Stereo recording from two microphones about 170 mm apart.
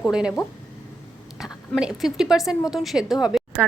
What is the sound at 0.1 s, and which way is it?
Speech, 5° right (ahead or behind).